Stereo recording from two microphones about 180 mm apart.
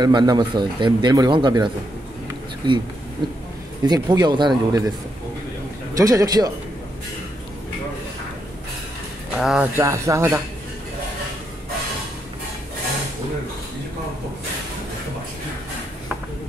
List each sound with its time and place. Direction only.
0.0 s speech: 25° right (ahead or behind)
3.8 s speech: 20° right (ahead or behind)
5.9 s speech: 20° right (ahead or behind)
9.4 s speech: 5° right (ahead or behind)
9.8 s speech: 15° right (ahead or behind)